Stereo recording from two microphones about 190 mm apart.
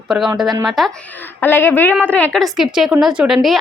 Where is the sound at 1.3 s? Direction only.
10° left (ahead or behind).